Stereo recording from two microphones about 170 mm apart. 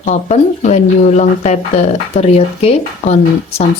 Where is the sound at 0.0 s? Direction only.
45° left (ahead or behind).